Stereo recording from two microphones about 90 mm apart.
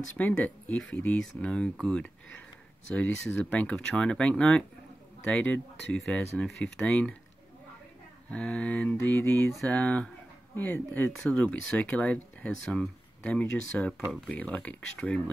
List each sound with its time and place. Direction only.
0.2 s speech: 15° left (ahead or behind)
8.3 s speech: 15° left (ahead or behind)